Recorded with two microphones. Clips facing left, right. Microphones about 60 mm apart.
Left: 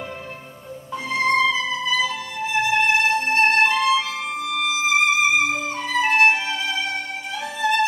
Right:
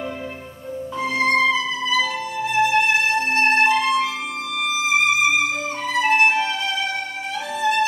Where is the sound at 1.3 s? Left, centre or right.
Centre.